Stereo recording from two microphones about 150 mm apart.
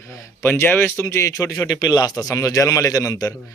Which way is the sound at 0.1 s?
15° left (ahead or behind).